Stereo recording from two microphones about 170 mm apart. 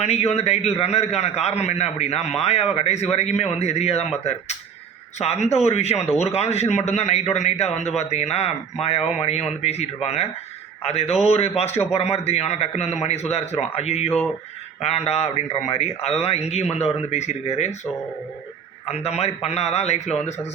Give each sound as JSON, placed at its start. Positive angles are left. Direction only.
{"t": 0.0, "sound": "a man's voice", "side_deg": 40}
{"t": 18.9, "sound": "a man's voice", "side_deg": 40}